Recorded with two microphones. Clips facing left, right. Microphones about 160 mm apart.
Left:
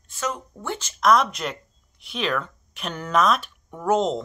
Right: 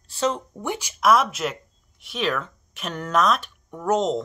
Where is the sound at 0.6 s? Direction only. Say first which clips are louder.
Right 1 dB; 15° right (ahead or behind).